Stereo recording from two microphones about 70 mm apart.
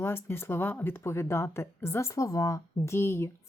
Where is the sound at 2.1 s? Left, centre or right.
Left.